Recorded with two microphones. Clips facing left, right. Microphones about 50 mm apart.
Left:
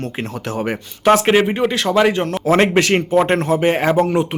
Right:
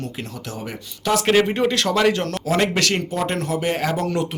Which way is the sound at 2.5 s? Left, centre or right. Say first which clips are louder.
Left 6 dB; left.